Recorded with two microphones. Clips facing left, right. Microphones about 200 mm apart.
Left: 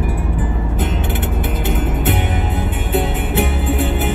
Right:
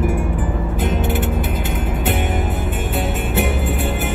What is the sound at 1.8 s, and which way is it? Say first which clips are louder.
Music: left 2 dB; 55° left (ahead or behind).